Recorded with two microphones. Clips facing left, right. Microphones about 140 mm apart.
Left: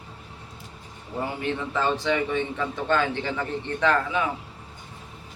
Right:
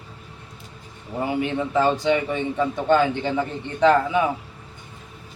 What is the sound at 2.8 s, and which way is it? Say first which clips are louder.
A man's voice: right 5 dB; 15° right (ahead or behind).